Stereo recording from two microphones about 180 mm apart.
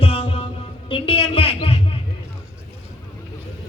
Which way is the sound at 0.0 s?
30° left (ahead or behind).